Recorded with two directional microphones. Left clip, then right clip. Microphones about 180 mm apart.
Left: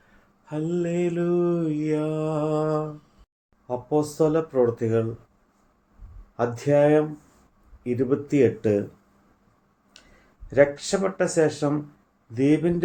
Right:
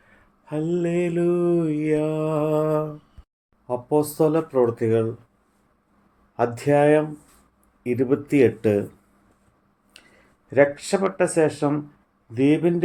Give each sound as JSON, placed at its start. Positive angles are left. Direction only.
{"t": 0.4, "sound": "mantra", "side_deg": -40}
{"t": 3.7, "sound": "speech", "side_deg": -45}
{"t": 6.3, "sound": "speech", "side_deg": -45}
{"t": 10.0, "sound": "a sound", "side_deg": -45}
{"t": 10.5, "sound": "speech", "side_deg": -40}